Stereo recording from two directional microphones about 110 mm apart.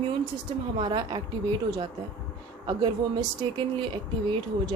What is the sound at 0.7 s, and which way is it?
A woman's voice, 40° right (ahead or behind).